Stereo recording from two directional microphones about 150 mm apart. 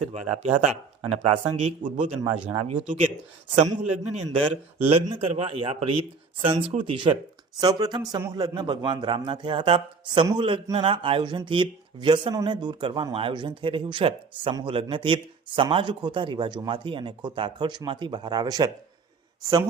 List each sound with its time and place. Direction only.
0.0 s speech: 45° right (ahead or behind)
2.2 s speech: 40° right (ahead or behind); by 3.1 s 55° right (ahead or behind)
3.6 s speech: 40° right (ahead or behind); by 18.7 s 25° right (ahead or behind)